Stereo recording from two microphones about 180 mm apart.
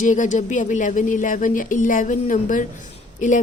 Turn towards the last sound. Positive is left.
turn(degrees=45)  # may be behind; listen again after turning